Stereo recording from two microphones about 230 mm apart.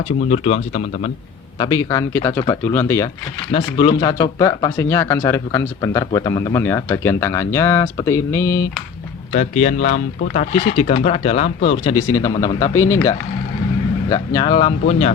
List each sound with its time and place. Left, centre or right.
0.3 s speech: left
1.5 s speech: centre
9.3 s speech: left